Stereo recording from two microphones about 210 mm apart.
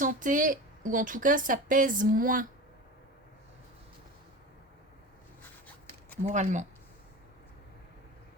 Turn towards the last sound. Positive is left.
turn(degrees=-35)  # may be behind; listen again after turning